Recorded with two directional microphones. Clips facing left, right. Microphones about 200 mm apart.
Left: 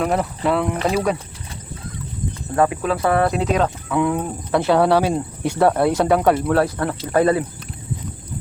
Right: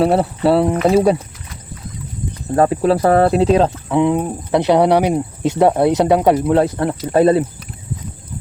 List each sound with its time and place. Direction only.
0.0 s speech: 35° right (ahead or behind)
2.6 s speech: 35° right (ahead or behind)